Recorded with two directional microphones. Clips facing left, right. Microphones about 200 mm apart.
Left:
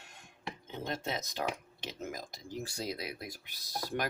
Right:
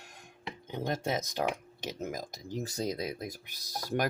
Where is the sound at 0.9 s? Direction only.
45° right (ahead or behind).